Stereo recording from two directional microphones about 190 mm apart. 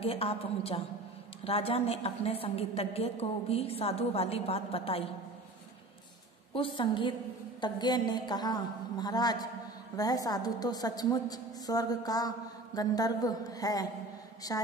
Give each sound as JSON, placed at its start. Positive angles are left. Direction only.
{"t": 0.0, "sound": "a woman's voice", "side_deg": 30}
{"t": 6.5, "sound": "a woman's voice", "side_deg": 25}